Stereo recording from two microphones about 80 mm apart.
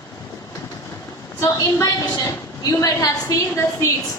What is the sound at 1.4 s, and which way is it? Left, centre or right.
A woman's voice, left.